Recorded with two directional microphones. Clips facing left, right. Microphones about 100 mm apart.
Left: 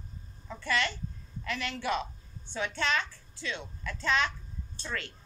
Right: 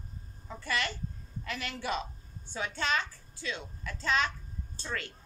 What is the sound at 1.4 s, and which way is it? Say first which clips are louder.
A woman's voice: left 3 dB; 35° right (ahead or behind).